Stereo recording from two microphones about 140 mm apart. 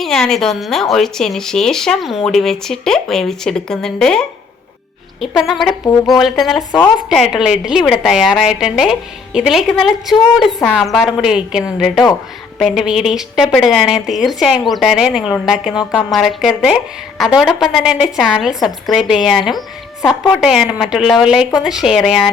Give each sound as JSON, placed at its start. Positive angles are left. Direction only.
{"t": 0.0, "sound": "speech", "side_deg": 5}